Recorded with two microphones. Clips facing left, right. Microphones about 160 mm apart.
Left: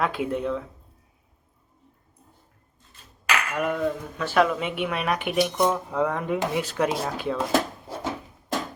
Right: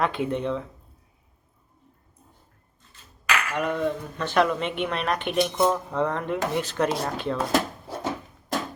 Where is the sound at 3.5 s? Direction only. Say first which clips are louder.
Even; 5° left (ahead or behind).